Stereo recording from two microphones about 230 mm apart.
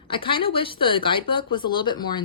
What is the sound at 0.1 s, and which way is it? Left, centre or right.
Speech, left.